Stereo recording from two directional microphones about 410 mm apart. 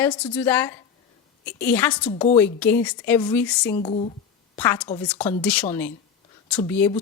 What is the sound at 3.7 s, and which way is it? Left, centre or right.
Speech, centre.